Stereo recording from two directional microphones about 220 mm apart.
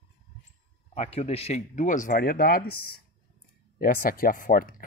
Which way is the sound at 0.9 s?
30° left (ahead or behind).